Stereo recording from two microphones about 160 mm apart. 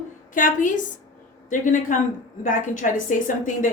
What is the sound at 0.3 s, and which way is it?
A woman's voice, 55° left (ahead or behind).